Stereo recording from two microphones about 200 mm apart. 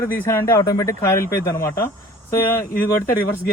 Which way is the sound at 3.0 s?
45° left (ahead or behind).